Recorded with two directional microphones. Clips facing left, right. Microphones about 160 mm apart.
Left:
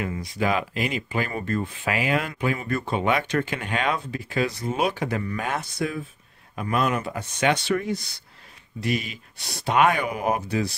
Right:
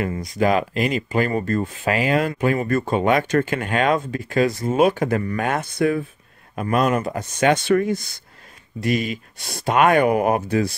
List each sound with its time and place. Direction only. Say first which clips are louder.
0.0 s speech: right 5 dB; 45° right (ahead or behind)
6.5 s speech: right 5 dB; 50° right (ahead or behind)